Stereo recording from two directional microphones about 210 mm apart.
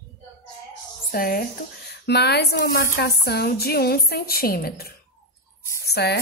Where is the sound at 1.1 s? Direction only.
45° left (ahead or behind).